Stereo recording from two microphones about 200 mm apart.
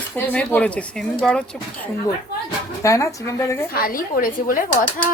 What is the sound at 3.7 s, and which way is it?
Speech, 45° left (ahead or behind).